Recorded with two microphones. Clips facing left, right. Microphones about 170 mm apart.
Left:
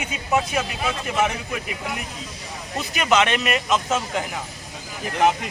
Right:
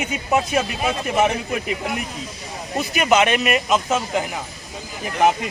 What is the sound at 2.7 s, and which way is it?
Speech, 15° right (ahead or behind).